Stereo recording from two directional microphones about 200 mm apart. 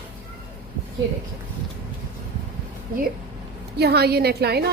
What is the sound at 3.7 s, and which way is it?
Speech, 55° right (ahead or behind).